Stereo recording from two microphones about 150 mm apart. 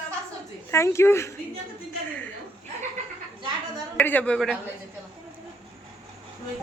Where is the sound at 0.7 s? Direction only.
20° left (ahead or behind).